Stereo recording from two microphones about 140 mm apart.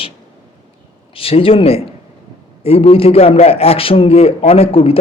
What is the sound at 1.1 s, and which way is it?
A man's voice, 40° left (ahead or behind).